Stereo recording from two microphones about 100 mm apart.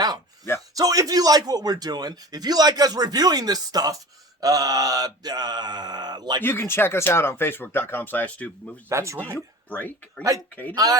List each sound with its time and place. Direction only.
0.7 s speech: 35° right (ahead or behind)
4.4 s mantra: 35° right (ahead or behind)
6.4 s speech: 25° left (ahead or behind)
8.9 s speech: 30° right (ahead or behind)
9.6 s speech: 15° left (ahead or behind)